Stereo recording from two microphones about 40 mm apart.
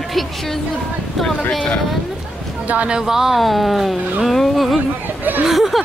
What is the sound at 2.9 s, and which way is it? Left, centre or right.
Speech, centre.